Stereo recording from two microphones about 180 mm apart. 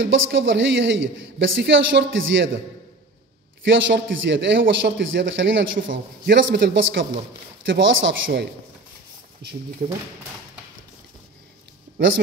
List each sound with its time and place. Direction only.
0.0 s a man's voice: 90° right
3.6 s a man's voice: 90° right
9.4 s speech: 65° right (ahead or behind)